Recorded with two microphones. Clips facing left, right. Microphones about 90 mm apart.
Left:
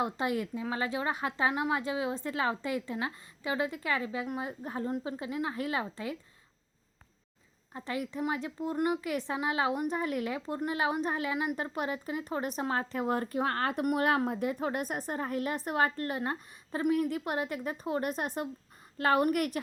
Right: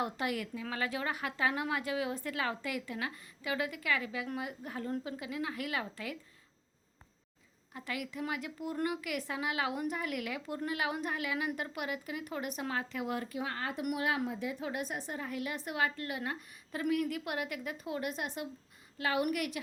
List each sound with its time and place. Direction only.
0.0 s a woman's voice: 25° left (ahead or behind)
7.7 s a woman's voice: 30° left (ahead or behind)